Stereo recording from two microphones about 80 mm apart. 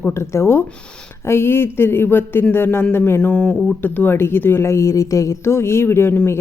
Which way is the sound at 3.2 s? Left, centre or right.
Centre.